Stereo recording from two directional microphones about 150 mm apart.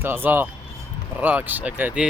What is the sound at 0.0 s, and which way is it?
Speech, 15° right (ahead or behind).